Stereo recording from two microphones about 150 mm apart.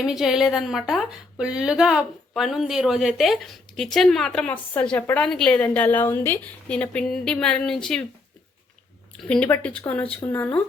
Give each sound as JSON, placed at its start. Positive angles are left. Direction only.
{"t": 0.0, "sound": "a woman's voice", "side_deg": 0}
{"t": 9.3, "sound": "speech", "side_deg": 10}